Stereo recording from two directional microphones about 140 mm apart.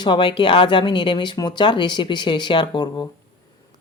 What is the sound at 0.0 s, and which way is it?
Speech, 35° left (ahead or behind).